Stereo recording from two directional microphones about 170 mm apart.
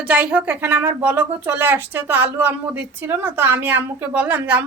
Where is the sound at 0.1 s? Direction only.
10° right (ahead or behind).